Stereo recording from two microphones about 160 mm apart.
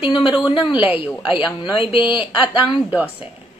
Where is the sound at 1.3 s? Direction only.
30° left (ahead or behind).